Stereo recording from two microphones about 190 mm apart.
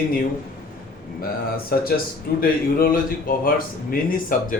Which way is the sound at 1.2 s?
50° left (ahead or behind).